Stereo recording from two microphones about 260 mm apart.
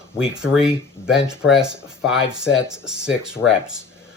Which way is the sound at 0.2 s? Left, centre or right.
Centre.